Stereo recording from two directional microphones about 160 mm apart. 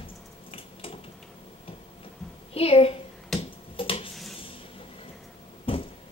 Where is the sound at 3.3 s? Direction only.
35° left (ahead or behind).